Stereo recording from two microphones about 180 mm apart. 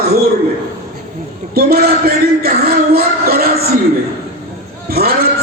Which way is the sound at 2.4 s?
55° right (ahead or behind).